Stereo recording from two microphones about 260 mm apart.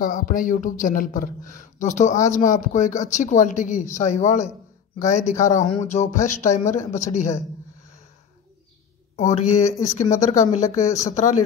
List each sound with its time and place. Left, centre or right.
0.0 s speech: left
9.1 s speech: left